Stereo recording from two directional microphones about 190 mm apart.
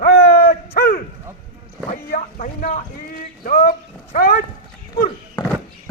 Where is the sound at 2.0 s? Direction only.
45° left (ahead or behind).